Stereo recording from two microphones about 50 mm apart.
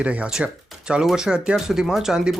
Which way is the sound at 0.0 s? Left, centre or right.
Right.